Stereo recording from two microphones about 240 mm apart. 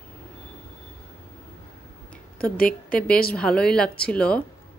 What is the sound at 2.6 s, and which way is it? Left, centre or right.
Speech, left.